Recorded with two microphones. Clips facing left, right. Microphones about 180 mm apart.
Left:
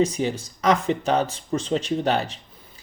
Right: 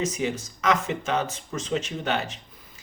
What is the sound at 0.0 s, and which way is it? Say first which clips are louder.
Speech: left 5 dB; 35° left (ahead or behind).